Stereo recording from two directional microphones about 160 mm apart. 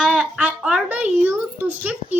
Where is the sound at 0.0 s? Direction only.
5° right (ahead or behind).